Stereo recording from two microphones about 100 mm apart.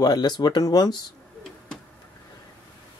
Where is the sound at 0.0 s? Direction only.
45° left (ahead or behind).